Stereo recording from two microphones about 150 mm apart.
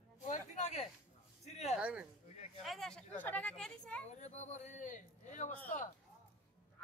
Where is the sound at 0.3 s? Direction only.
50° left (ahead or behind).